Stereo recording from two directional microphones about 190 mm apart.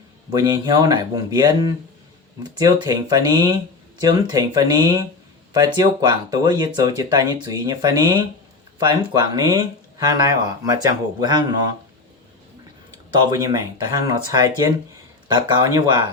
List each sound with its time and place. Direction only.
0.3 s speech: 20° right (ahead or behind)
13.1 s speech: 20° right (ahead or behind)